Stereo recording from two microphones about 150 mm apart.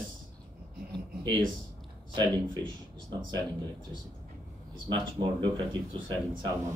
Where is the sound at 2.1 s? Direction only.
30° right (ahead or behind).